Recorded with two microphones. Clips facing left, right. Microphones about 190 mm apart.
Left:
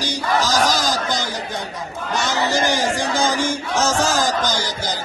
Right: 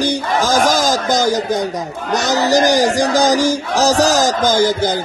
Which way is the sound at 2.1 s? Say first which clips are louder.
Right 7 dB; 40° right (ahead or behind).